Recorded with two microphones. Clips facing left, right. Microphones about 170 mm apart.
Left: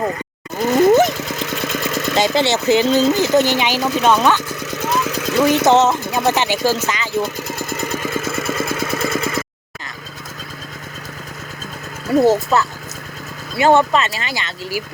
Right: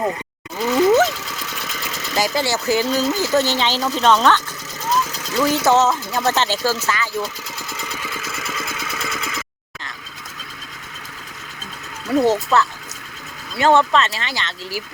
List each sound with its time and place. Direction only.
0.6 s wild animals: 50° left (ahead or behind)
1.1 s vehicle: 55° left (ahead or behind)
2.1 s speech: 25° left (ahead or behind)
3.8 s speech: 60° left (ahead or behind)
4.0 s speech: 10° left (ahead or behind)
4.6 s vehicle: 65° left (ahead or behind)
5.6 s speech: 20° left (ahead or behind)
7.2 s vehicle: 50° left (ahead or behind)
12.2 s speech: 10° left (ahead or behind)